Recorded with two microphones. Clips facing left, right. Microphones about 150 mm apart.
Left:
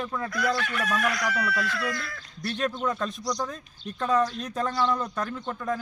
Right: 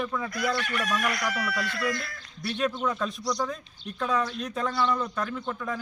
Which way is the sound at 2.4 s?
Centre (ahead or behind).